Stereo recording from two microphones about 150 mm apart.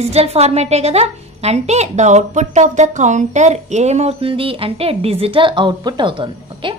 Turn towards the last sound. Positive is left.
turn(degrees=-35)  # may be behind; listen again after turning